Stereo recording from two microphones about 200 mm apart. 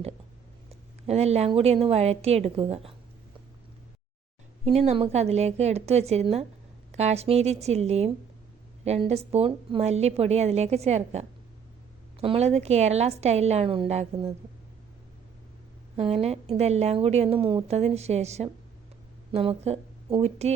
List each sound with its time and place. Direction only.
0.7 s a woman's voice: 30° right (ahead or behind)
4.6 s a woman's voice: 30° right (ahead or behind)
16.0 s a woman's voice: 30° right (ahead or behind)